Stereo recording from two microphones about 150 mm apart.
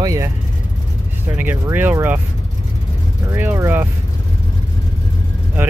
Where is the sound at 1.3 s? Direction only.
10° right (ahead or behind).